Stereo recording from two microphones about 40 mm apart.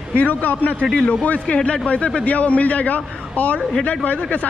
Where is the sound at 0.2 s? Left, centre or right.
Left.